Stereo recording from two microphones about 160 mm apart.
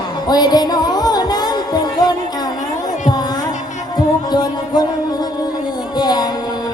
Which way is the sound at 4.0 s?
25° left (ahead or behind).